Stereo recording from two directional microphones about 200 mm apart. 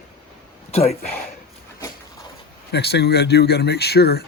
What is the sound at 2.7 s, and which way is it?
Speech, 55° left (ahead or behind).